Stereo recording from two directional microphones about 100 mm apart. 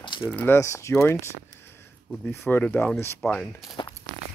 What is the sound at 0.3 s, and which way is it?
Speech, 15° left (ahead or behind).